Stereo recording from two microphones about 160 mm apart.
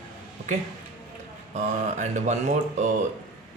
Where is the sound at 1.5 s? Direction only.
50° right (ahead or behind).